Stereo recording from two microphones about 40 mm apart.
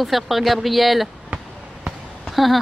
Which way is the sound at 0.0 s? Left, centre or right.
Centre.